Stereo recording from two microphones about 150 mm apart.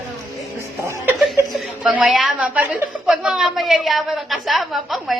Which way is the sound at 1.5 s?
5° right (ahead or behind).